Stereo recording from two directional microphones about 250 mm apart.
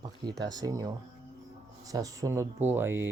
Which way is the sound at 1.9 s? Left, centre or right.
Centre.